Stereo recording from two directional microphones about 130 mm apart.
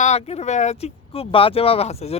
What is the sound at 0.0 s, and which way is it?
Speech, 55° left (ahead or behind).